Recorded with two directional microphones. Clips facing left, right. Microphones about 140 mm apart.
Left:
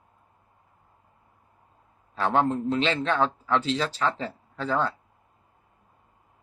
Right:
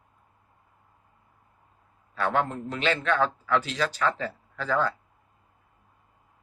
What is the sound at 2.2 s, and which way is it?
A man's voice, 25° left (ahead or behind).